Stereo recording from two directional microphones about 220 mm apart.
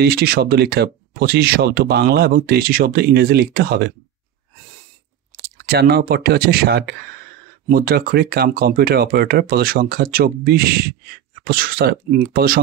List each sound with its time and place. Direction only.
0.0 s speech: 45° right (ahead or behind)
5.4 s speech: 45° right (ahead or behind)